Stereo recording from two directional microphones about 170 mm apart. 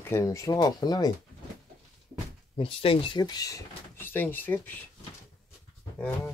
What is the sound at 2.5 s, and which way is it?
Speech, 30° left (ahead or behind).